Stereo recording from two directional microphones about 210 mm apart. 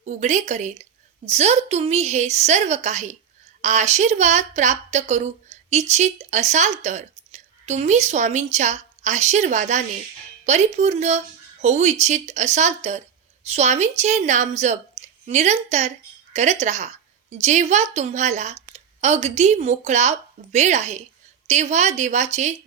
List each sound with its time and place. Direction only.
0.0 s a woman's voice: 35° right (ahead or behind)